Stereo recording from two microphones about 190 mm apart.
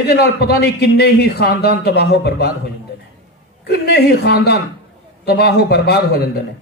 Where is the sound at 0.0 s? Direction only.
55° left (ahead or behind).